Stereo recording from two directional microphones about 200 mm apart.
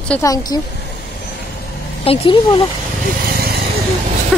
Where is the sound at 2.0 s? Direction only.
25° left (ahead or behind).